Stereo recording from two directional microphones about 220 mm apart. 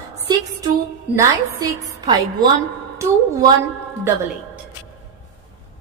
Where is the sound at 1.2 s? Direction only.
15° right (ahead or behind).